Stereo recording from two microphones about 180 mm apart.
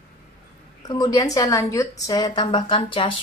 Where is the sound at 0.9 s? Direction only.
20° left (ahead or behind).